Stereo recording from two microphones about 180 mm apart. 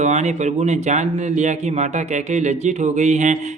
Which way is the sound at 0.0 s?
40° right (ahead or behind).